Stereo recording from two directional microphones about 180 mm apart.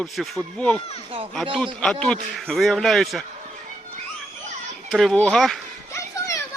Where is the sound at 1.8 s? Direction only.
5° left (ahead or behind).